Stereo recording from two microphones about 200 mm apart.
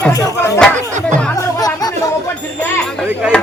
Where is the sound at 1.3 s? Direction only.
20° left (ahead or behind).